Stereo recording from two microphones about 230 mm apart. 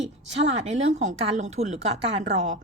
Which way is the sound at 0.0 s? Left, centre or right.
Right.